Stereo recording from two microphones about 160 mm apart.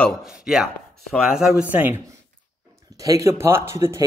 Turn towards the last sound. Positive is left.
turn(degrees=-15)  # may be behind; listen again after turning